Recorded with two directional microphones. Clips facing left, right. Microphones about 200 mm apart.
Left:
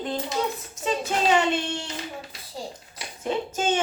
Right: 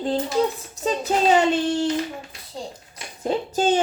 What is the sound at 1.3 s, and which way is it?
Speech, 35° right (ahead or behind).